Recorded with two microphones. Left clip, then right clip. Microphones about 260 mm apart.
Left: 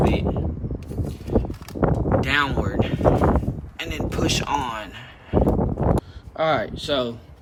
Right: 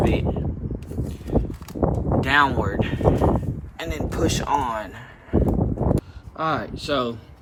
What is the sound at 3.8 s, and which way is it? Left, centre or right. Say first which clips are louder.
Speech: right 1 dB; centre.